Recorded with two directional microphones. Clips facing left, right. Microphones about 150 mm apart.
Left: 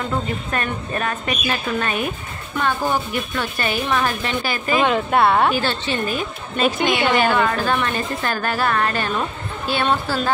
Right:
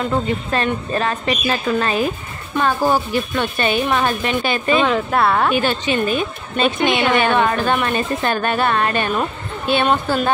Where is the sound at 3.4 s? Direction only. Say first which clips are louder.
Right 5 dB; 25° right (ahead or behind).